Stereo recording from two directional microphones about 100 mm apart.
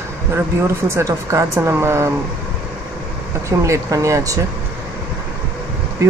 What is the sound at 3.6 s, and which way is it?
Speech, 30° right (ahead or behind).